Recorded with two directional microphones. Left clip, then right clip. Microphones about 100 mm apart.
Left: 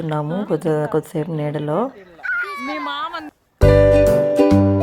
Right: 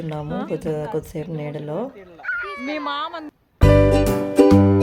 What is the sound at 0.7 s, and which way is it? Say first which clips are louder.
A woman's voice: left 8 dB; 35° left (ahead or behind).